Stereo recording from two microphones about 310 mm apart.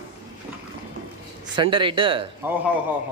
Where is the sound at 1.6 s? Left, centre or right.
Centre.